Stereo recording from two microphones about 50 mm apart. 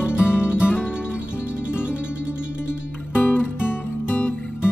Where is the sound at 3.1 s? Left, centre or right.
Left.